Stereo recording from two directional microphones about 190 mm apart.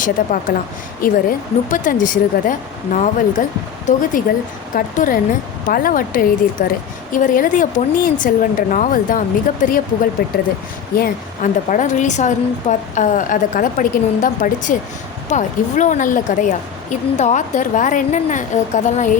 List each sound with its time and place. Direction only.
0.0 s a woman's voice: 45° left (ahead or behind)